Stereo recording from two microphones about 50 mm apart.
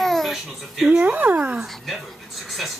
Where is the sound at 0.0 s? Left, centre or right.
Centre.